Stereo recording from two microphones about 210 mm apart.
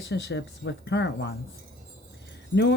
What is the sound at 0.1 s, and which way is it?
Speech, 55° left (ahead or behind).